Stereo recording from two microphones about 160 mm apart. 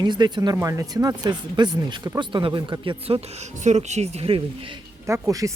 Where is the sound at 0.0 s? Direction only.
25° right (ahead or behind).